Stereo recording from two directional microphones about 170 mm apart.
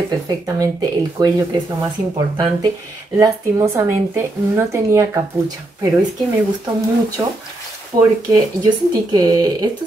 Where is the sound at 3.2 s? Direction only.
15° right (ahead or behind).